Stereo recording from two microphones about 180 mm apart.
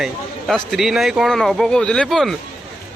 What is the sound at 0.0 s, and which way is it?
A man's voice, centre (ahead or behind).